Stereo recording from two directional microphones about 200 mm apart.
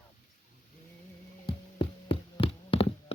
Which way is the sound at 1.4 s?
25° left (ahead or behind).